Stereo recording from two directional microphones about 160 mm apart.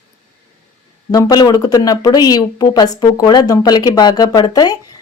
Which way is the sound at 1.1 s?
25° left (ahead or behind).